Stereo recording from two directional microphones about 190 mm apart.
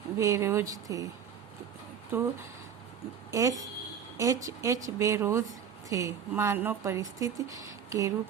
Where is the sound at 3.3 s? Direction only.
15° right (ahead or behind).